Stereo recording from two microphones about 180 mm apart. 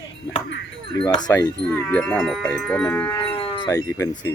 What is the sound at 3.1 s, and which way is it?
Wind chime, 30° left (ahead or behind).